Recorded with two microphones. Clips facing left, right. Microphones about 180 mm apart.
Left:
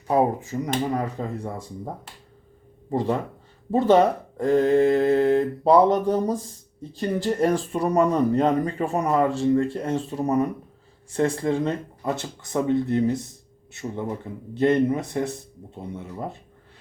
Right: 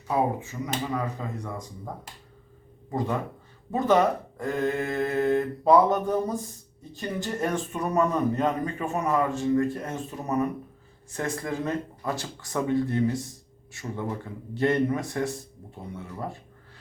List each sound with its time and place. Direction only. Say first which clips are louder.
0.6 s speech: left 5 dB; 40° left (ahead or behind)
2.9 s speech: left 4 dB; 30° left (ahead or behind)